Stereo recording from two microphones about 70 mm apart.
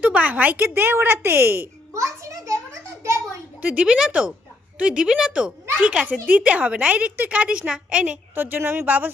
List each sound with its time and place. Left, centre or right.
0.0 s speech: right
0.7 s a child's voice: right
3.6 s speech: right
3.8 s a woman's voice: centre
8.4 s a child's voice: right